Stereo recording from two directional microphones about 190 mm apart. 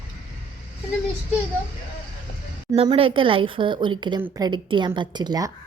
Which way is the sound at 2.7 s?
30° right (ahead or behind).